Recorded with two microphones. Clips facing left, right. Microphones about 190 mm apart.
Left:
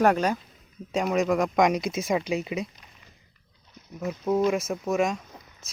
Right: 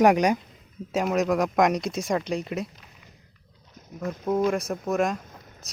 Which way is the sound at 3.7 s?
45° right (ahead or behind).